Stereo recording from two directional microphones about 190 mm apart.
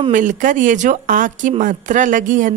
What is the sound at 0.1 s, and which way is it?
A woman's voice, 40° right (ahead or behind).